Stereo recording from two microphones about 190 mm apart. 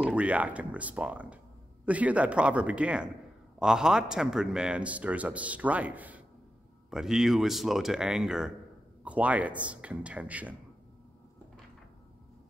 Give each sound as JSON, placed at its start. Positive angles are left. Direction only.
{"t": 0.0, "sound": "a man's voice", "side_deg": -5}